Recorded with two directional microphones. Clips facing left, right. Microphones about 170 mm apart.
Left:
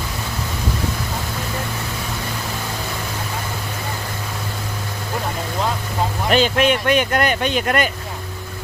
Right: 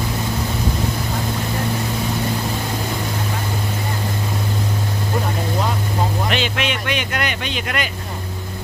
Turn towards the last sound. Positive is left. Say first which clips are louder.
# left 6 dB
turn(degrees=45)  # may be behind; listen again after turning